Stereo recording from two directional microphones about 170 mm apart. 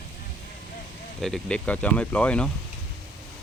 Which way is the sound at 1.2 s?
5° left (ahead or behind).